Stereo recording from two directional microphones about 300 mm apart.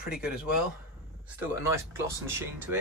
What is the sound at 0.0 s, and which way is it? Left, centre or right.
Speech, centre.